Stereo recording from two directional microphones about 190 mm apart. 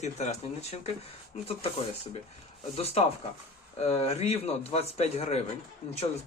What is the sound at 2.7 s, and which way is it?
Speech, 30° left (ahead or behind).